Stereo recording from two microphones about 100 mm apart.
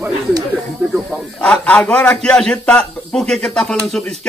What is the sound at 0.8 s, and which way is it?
Speech, 15° right (ahead or behind).